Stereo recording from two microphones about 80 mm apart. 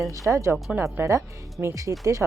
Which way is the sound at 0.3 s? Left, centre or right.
Right.